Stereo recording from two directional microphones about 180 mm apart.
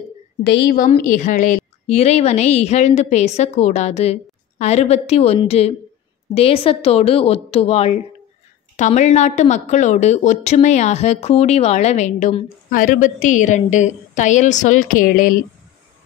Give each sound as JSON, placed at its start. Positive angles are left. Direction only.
{"t": 0.5, "sound": "a woman's voice", "side_deg": 65}
{"t": 0.9, "sound": "a woman's voice", "side_deg": 45}